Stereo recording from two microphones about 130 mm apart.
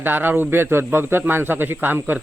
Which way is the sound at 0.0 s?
15° right (ahead or behind).